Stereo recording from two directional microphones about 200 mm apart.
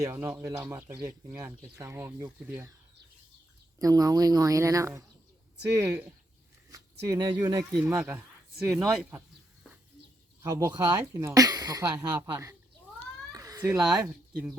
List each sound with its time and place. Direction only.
0.0 s speech: 10° right (ahead or behind)
3.8 s speech: 20° right (ahead or behind)
10.4 s speech: 15° right (ahead or behind)
13.3 s cat: 15° right (ahead or behind)
13.7 s speech: centre (ahead or behind)